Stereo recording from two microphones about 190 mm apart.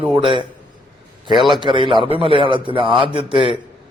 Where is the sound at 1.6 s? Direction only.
25° right (ahead or behind).